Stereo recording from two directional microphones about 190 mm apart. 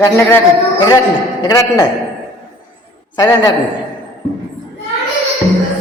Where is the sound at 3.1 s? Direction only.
20° left (ahead or behind).